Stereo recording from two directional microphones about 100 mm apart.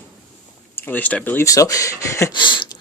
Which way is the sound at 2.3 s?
50° left (ahead or behind).